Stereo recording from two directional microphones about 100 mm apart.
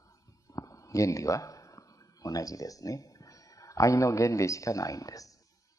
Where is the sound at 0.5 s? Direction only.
35° left (ahead or behind).